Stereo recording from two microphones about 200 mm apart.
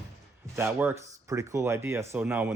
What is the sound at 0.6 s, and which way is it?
Speech, 10° right (ahead or behind).